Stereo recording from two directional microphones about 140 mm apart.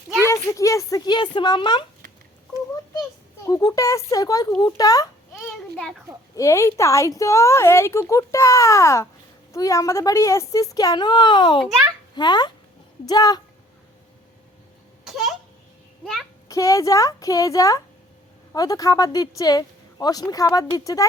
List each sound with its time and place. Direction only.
0.3 s speech: 20° left (ahead or behind)
3.4 s a woman's voice: 25° left (ahead or behind)
5.7 s a child's voice: centre (ahead or behind)
6.3 s a woman's voice: 20° left (ahead or behind)
16.5 s a woman's voice: 25° left (ahead or behind)